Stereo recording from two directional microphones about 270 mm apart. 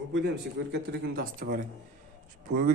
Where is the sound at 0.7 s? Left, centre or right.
Right.